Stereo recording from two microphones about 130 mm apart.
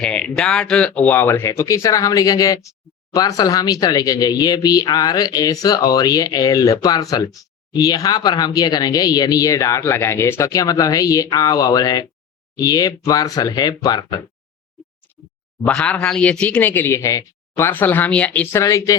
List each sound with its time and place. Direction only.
0.0 s speech: 5° left (ahead or behind); by 14.2 s 30° left (ahead or behind)
15.6 s speech: 5° left (ahead or behind)
18.5 s speech: 25° left (ahead or behind)